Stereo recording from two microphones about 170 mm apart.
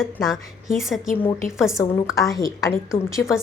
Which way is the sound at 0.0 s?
Centre (ahead or behind).